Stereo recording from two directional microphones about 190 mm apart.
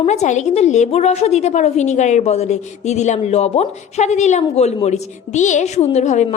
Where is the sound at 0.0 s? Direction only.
35° left (ahead or behind).